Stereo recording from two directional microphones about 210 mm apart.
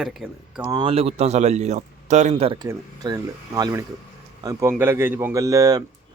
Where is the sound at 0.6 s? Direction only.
20° right (ahead or behind).